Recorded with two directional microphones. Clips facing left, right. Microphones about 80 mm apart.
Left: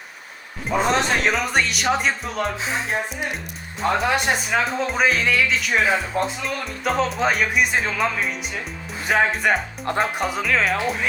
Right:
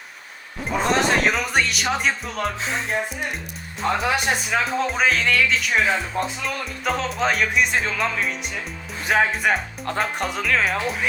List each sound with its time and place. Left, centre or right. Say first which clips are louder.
0.7 s speech: even; centre